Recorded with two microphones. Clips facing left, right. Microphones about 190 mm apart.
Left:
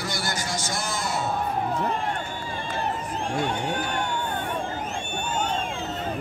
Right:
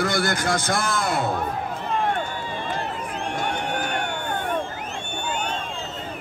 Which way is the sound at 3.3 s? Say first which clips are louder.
Left 1 dB; 65° right (ahead or behind).